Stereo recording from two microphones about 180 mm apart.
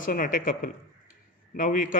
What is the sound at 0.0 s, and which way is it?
Speech, 50° left (ahead or behind).